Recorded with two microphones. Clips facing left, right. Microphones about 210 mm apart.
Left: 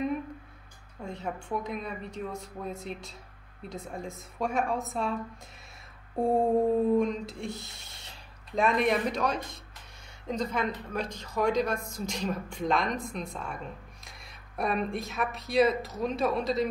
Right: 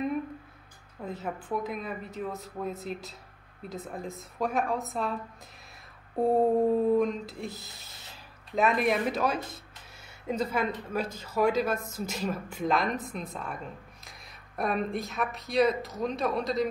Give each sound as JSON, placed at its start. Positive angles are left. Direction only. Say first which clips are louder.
{"t": 1.0, "sound": "a woman's voice", "louder": "right 1 dB", "side_deg": 0}
{"t": 6.1, "sound": "a woman's voice", "louder": "right 1 dB", "side_deg": 0}